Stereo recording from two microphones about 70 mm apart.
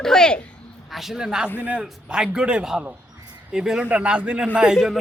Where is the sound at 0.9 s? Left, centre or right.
Centre.